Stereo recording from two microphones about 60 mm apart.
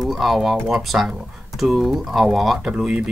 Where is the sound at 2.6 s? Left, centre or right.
Centre.